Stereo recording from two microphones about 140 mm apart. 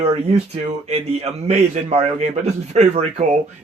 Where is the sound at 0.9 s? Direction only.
50° right (ahead or behind).